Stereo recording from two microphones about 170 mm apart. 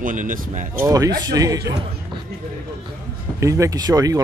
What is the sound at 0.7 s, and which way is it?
Speech, 20° right (ahead or behind).